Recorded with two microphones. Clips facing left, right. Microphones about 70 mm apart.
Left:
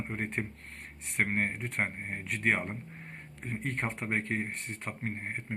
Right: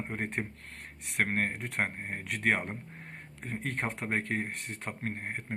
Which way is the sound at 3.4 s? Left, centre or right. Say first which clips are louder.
Even; right.